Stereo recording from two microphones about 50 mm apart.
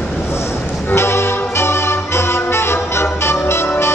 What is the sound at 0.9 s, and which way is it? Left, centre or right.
Music, left.